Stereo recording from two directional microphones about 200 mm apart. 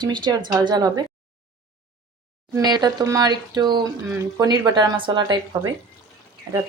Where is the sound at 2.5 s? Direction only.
20° right (ahead or behind).